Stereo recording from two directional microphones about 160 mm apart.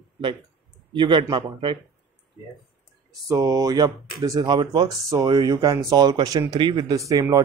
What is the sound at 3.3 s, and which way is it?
Speech, 20° right (ahead or behind).